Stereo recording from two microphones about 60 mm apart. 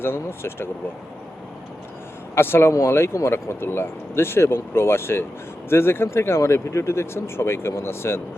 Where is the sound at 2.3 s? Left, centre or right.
Left.